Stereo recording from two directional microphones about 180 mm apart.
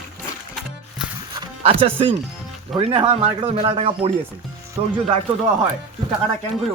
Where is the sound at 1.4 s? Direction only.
30° right (ahead or behind).